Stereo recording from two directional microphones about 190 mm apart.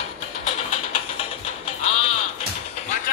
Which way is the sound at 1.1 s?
30° left (ahead or behind).